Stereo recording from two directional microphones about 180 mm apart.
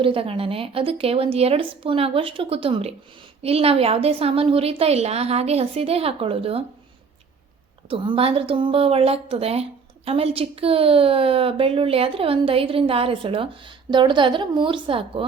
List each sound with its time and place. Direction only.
0.0 s a woman's voice: 30° right (ahead or behind)
7.9 s a woman's voice: 30° right (ahead or behind)